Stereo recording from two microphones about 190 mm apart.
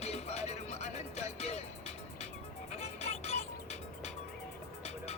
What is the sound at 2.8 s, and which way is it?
Music, 35° left (ahead or behind).